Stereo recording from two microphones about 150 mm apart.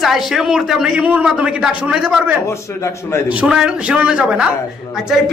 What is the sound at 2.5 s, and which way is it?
Speech, 20° left (ahead or behind).